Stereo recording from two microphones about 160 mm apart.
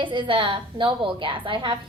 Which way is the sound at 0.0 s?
30° right (ahead or behind).